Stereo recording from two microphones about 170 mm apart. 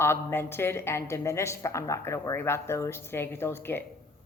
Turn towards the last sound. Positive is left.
turn(degrees=15)  # may be behind; listen again after turning